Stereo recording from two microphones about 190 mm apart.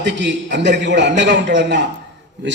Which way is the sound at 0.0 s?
65° right (ahead or behind).